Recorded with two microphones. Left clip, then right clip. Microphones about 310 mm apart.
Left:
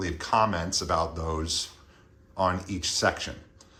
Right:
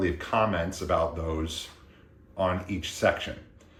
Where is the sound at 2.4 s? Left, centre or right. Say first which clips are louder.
Left 1 dB; left.